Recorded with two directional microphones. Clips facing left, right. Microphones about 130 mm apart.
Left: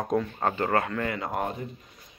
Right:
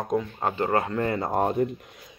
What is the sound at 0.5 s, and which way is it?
Speech, 25° right (ahead or behind).